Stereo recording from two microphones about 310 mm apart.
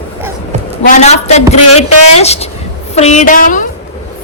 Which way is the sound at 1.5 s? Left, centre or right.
Left.